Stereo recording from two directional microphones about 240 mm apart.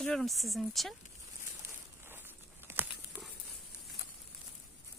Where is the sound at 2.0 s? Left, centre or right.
Centre.